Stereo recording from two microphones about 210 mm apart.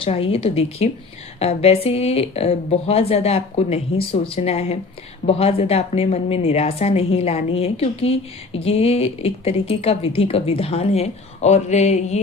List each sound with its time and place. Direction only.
0.0 s a woman's voice: 25° left (ahead or behind)